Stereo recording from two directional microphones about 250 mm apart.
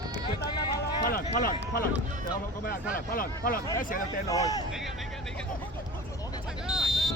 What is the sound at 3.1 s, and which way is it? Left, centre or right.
Speech, left.